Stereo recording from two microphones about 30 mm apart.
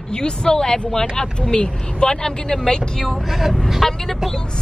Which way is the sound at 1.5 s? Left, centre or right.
Left.